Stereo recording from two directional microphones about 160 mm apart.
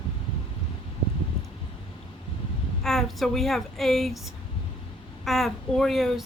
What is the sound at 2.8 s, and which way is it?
A woman's voice, centre (ahead or behind).